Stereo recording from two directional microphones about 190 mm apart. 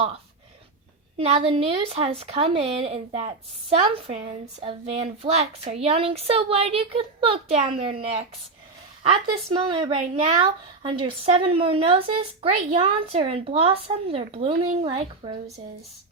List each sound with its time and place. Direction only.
1.1 s a woman's voice: 30° right (ahead or behind)
9.5 s a woman's voice: 25° right (ahead or behind)